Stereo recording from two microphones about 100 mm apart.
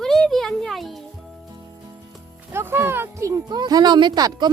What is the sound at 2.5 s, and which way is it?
Speech, 25° right (ahead or behind).